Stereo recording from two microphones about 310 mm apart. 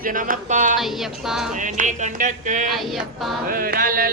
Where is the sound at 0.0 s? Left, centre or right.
Right.